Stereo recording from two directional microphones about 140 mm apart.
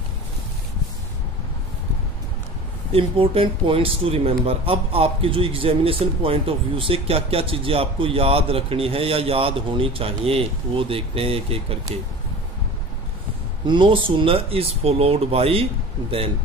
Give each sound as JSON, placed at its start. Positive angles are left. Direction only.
{"t": 2.9, "sound": "speech", "side_deg": -40}
{"t": 13.7, "sound": "speech", "side_deg": -35}